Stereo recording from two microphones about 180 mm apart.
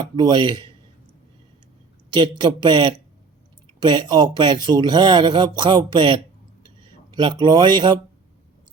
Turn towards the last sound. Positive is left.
turn(degrees=-25)  # may be behind; listen again after turning